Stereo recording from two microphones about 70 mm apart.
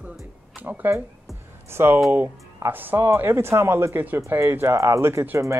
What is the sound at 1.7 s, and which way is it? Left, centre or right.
Speech, right.